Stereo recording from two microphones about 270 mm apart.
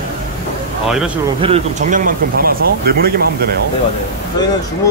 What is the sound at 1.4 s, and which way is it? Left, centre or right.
Speech, right.